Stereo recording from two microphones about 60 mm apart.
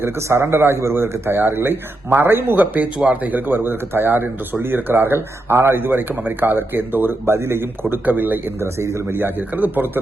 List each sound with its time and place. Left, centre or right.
0.0 s speech: right